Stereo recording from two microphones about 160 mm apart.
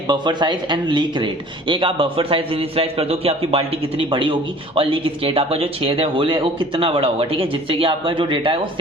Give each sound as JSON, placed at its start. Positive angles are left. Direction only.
{"t": 0.1, "sound": "speech", "side_deg": -30}